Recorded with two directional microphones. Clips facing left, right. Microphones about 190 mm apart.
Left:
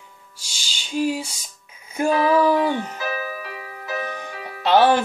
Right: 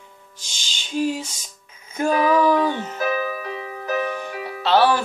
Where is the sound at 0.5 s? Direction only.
10° left (ahead or behind).